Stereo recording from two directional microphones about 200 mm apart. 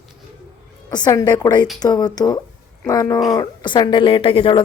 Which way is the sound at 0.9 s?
20° left (ahead or behind).